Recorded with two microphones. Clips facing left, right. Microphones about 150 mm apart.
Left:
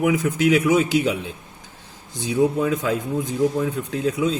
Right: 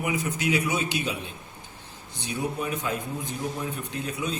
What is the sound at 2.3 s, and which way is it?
A man's voice, 90° left.